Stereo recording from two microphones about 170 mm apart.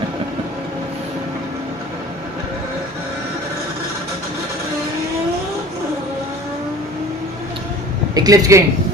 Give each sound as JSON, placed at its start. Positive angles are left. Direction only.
{"t": 8.1, "sound": "speech", "side_deg": -20}